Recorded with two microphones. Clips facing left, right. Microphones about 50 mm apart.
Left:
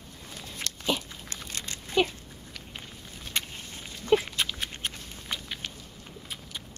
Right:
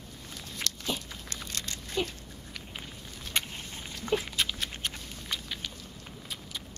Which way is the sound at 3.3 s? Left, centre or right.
Centre.